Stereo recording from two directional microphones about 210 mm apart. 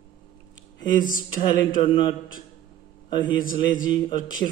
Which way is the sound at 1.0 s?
40° left (ahead or behind).